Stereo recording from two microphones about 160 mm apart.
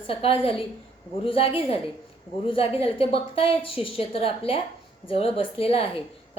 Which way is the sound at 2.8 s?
35° left (ahead or behind).